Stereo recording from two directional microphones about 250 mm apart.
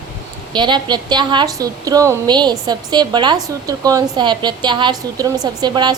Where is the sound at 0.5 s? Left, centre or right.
Centre.